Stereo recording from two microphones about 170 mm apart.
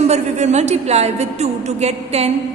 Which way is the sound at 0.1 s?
40° right (ahead or behind).